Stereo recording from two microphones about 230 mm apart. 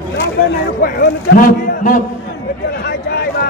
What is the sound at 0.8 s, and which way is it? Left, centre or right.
A man's voice, left.